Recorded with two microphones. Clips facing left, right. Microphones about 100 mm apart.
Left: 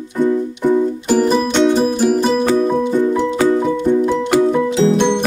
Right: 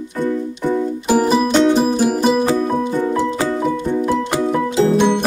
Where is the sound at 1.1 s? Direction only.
5° right (ahead or behind).